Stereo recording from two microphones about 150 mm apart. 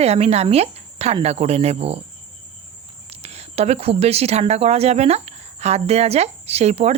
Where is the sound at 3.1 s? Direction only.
45° right (ahead or behind).